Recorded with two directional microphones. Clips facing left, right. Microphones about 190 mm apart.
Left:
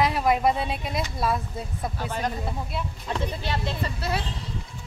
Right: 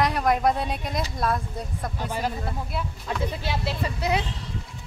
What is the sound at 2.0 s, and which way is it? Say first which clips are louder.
Speech: right 1 dB; 10° right (ahead or behind).